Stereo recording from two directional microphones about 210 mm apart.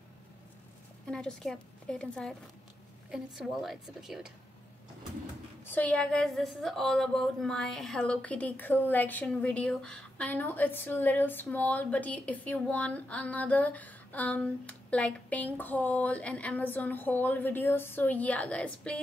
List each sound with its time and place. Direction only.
1.1 s a woman's voice: 5° left (ahead or behind)
5.7 s a woman's voice: 5° left (ahead or behind)